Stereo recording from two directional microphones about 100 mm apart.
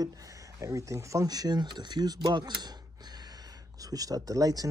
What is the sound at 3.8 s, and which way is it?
Speech, 40° right (ahead or behind).